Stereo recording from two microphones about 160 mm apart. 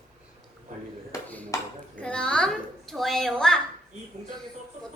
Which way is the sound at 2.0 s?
5° left (ahead or behind).